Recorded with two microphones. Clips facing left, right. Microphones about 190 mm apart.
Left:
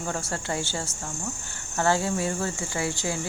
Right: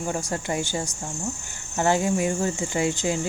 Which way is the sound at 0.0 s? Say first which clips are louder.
Right 3 dB; 15° right (ahead or behind).